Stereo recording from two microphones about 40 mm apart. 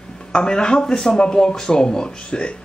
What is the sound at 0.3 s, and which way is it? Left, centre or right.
Speech, centre.